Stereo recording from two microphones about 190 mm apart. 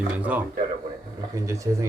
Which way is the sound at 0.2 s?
10° right (ahead or behind).